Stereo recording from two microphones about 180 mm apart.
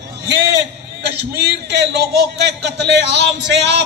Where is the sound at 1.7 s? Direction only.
70° right (ahead or behind).